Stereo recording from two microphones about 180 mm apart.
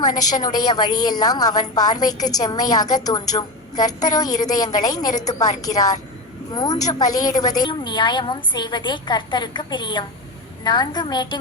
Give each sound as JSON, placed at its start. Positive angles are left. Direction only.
{"t": 0.5, "sound": "a woman's voice", "side_deg": 25}